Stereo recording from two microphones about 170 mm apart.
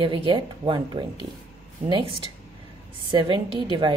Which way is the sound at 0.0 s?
30° right (ahead or behind).